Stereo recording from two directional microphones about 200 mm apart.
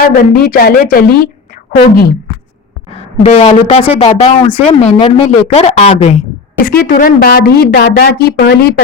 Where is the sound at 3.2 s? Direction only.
35° left (ahead or behind).